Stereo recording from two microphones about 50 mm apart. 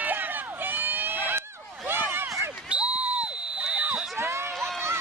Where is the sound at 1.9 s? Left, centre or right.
Right.